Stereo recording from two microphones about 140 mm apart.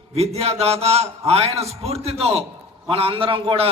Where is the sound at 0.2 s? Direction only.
50° right (ahead or behind).